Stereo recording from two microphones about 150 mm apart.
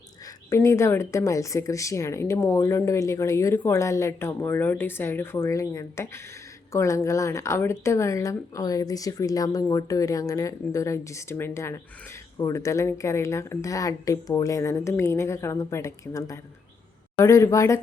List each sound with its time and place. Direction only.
0.3 s a woman's voice: 20° left (ahead or behind)